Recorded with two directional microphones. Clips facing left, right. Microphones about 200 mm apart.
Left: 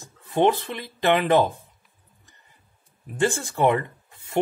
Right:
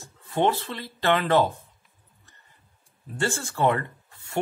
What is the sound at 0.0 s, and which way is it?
Speech, 20° left (ahead or behind).